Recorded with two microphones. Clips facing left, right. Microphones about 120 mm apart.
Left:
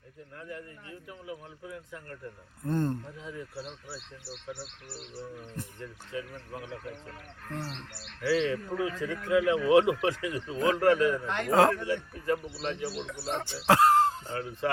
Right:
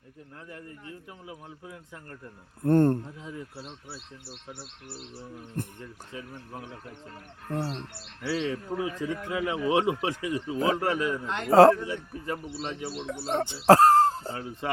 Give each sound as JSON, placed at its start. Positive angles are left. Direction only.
{"t": 1.6, "sound": "speech", "side_deg": -25}
{"t": 2.6, "sound": "speech", "side_deg": -60}
{"t": 5.6, "sound": "speech", "side_deg": -55}
{"t": 7.6, "sound": "speech", "side_deg": -30}
{"t": 11.5, "sound": "speech", "side_deg": -35}
{"t": 11.8, "sound": "speech", "side_deg": -20}